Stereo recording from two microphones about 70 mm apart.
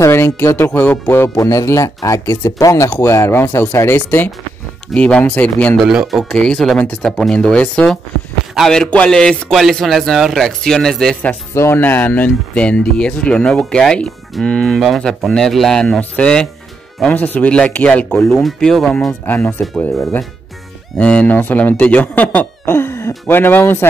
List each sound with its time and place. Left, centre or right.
0.0 s speech: left
1.3 s speech: left
4.9 s speech: centre
5.9 s a man's voice: centre
6.3 s a man's voice: centre
7.3 s speech: centre
8.9 s speech: centre
9.5 s a man's voice: centre
11.5 s speech: left
18.2 s speech: centre
19.2 s speech: left
21.0 s speech: centre
22.7 s throat clearing: left
23.2 s speech: left